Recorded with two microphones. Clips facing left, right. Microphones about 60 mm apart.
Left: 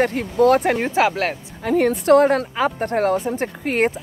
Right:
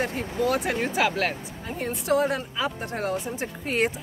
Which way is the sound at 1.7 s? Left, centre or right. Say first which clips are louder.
Left 11 dB; left.